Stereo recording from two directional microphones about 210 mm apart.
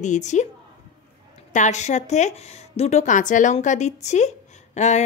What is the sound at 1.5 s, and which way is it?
A woman's voice, 35° left (ahead or behind).